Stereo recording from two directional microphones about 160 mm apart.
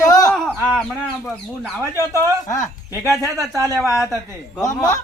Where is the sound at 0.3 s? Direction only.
5° left (ahead or behind).